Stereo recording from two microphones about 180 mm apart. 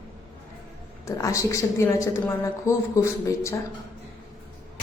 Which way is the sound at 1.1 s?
20° left (ahead or behind).